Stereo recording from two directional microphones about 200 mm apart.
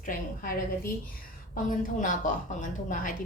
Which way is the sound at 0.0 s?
45° left (ahead or behind).